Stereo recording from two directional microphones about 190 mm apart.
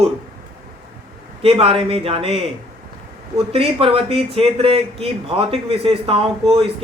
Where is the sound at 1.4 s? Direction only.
30° right (ahead or behind).